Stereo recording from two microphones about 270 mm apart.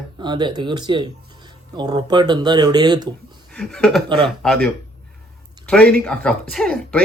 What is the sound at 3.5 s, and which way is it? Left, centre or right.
A man's voice, centre.